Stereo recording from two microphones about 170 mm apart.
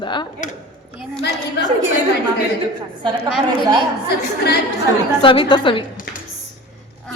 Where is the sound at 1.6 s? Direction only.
75° left (ahead or behind).